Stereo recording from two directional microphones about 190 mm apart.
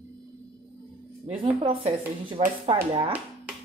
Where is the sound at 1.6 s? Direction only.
30° right (ahead or behind).